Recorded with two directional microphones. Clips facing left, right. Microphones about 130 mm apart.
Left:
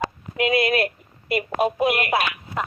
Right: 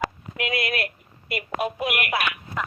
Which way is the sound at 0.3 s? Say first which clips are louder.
Left 7 dB; 25° left (ahead or behind).